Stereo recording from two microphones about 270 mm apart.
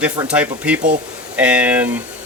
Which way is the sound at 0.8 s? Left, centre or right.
Right.